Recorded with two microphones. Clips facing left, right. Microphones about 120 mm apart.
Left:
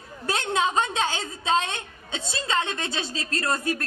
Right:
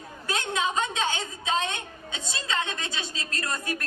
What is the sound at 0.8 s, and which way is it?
Speech, 50° left (ahead or behind).